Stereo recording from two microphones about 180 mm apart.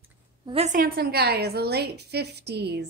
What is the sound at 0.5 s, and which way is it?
Speech, 35° right (ahead or behind).